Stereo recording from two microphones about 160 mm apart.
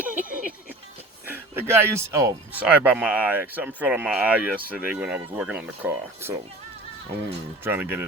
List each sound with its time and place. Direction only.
0.1 s music: 55° right (ahead or behind)
1.5 s speech: 15° right (ahead or behind)
5.9 s speech: 20° right (ahead or behind)
7.6 s speech: 15° right (ahead or behind)